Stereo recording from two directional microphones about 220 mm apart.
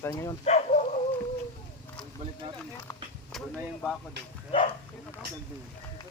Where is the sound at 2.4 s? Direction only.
20° right (ahead or behind).